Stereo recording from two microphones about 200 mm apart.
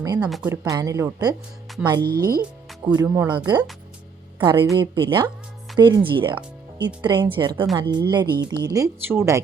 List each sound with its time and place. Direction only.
0.2 s speech: 5° right (ahead or behind)
0.5 s speech: 20° right (ahead or behind)
2.0 s speech: 50° right (ahead or behind)
2.8 s a woman's voice: 20° right (ahead or behind)